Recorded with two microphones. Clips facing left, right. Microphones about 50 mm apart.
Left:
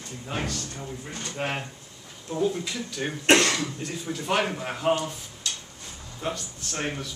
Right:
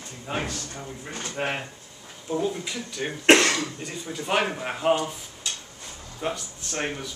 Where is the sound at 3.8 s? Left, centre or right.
Centre.